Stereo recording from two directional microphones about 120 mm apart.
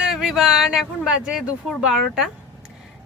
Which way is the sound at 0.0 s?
5° right (ahead or behind).